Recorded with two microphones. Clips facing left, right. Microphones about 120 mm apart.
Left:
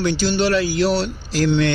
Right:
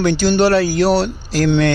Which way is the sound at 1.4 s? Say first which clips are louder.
Right 3 dB; 60° right (ahead or behind).